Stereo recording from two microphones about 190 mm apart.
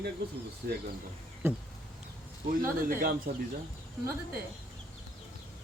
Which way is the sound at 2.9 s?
50° right (ahead or behind).